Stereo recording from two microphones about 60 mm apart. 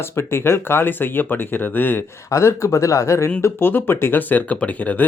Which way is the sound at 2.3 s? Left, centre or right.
Left.